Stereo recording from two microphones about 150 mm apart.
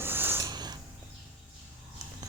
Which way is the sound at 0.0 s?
15° right (ahead or behind).